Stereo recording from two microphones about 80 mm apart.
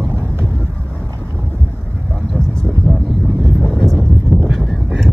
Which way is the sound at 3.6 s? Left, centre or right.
Centre.